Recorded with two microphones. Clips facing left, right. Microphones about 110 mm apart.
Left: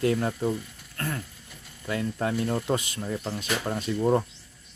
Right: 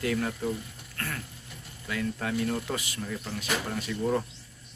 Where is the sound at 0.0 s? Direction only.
30° left (ahead or behind).